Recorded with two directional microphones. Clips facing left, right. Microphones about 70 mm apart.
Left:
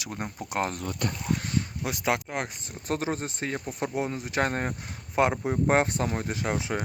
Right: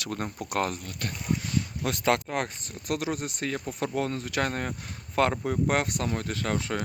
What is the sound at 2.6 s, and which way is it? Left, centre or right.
Speech, left.